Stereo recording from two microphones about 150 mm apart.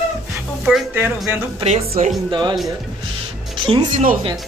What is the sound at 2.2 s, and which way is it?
Speech, 30° right (ahead or behind).